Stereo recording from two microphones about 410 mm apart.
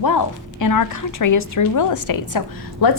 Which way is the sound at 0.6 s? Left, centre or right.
Left.